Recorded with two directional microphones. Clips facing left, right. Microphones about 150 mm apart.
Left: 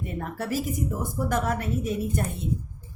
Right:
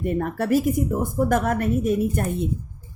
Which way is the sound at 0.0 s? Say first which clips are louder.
Right 8 dB; 55° right (ahead or behind).